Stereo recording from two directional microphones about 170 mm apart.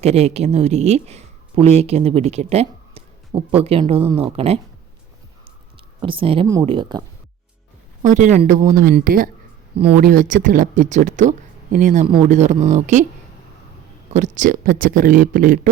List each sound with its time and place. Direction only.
0.0 s speech: 40° right (ahead or behind)
6.0 s speech: 30° right (ahead or behind)
8.0 s speech: 45° right (ahead or behind)
9.7 s speech: 35° right (ahead or behind)
10.0 s speech: 50° right (ahead or behind)
12.0 s speech: 30° right (ahead or behind)
12.4 s speech: 45° right (ahead or behind)
14.1 s speech: 45° right (ahead or behind)